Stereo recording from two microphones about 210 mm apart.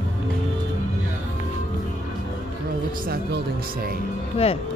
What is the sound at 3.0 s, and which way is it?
Speech, 45° right (ahead or behind).